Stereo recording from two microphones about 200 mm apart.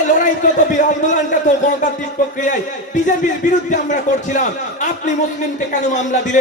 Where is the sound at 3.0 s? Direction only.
40° left (ahead or behind).